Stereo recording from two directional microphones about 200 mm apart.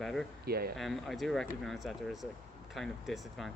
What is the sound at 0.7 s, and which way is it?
Speech, centre (ahead or behind).